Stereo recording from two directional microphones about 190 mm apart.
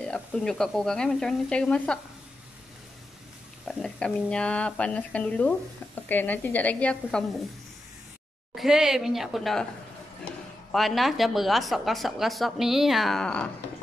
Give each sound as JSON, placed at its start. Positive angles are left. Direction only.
{"t": 0.0, "sound": "a woman's voice", "side_deg": 5}
{"t": 3.6, "sound": "speech", "side_deg": 5}
{"t": 8.5, "sound": "a woman's voice", "side_deg": -5}
{"t": 10.7, "sound": "a woman's voice", "side_deg": 0}